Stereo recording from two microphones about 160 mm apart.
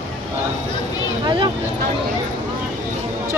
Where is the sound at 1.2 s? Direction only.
30° right (ahead or behind).